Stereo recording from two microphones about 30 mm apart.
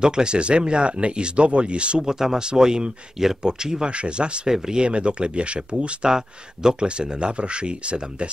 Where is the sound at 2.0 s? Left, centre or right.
Centre.